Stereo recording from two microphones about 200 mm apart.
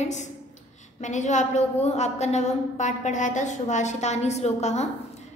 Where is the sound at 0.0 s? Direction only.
35° left (ahead or behind).